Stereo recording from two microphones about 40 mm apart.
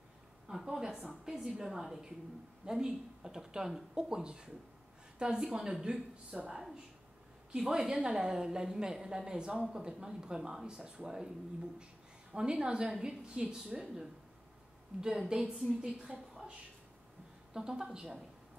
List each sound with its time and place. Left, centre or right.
0.5 s a sound: centre
1.2 s a woman's voice: centre
12.3 s a woman's voice: right
15.0 s a woman's voice: centre
17.6 s a woman's voice: centre